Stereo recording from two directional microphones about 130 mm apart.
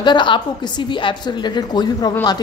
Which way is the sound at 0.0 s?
35° left (ahead or behind).